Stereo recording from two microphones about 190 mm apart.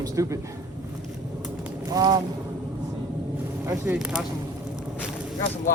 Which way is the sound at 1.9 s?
20° right (ahead or behind).